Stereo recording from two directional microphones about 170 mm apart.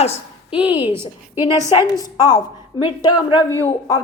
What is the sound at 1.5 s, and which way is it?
Speech, 20° right (ahead or behind).